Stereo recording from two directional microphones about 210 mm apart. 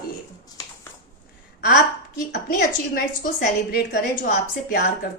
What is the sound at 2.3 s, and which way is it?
A woman's voice, 50° left (ahead or behind).